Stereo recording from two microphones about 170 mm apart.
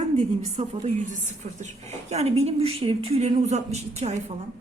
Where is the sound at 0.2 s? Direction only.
40° right (ahead or behind).